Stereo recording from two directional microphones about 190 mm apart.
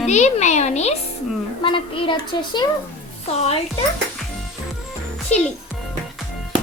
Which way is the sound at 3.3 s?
35° left (ahead or behind).